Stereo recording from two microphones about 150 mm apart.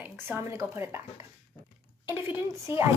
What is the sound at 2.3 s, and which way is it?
Speech, 15° right (ahead or behind).